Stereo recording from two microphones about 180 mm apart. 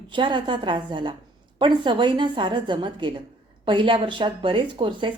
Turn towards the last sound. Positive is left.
turn(degrees=-25)  # may be behind; listen again after turning